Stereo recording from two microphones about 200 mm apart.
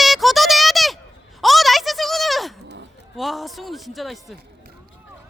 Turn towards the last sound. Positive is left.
turn(degrees=0)  # may be behind; listen again after turning